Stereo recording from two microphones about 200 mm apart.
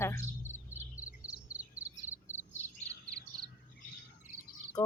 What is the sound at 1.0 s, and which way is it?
Cricket, 5° right (ahead or behind).